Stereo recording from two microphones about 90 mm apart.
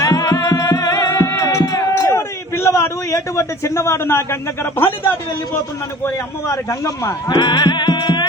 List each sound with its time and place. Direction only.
0.0 s music: 40° left (ahead or behind); by 4.9 s 25° left (ahead or behind)
6.5 s speech: 40° left (ahead or behind)
7.3 s music: 55° left (ahead or behind)